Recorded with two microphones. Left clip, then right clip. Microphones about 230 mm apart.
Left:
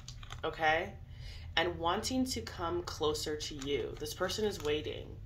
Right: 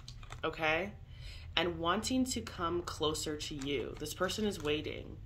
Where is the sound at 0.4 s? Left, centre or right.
Right.